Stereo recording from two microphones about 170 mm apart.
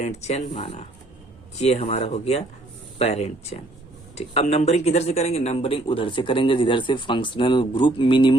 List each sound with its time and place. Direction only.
0.0 s speech: 40° left (ahead or behind)